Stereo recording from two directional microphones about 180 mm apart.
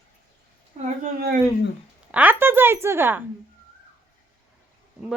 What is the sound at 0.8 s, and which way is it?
Speech, 40° right (ahead or behind).